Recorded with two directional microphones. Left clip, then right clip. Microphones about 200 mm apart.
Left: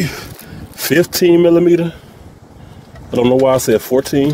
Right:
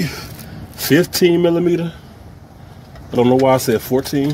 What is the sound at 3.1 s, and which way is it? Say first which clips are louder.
Speech: left 1 dB; 50° left (ahead or behind).